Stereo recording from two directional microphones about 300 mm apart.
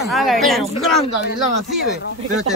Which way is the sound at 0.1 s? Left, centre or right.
Centre.